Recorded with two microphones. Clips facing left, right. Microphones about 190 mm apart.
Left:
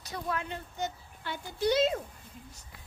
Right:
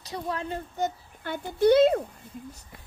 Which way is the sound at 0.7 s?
50° right (ahead or behind).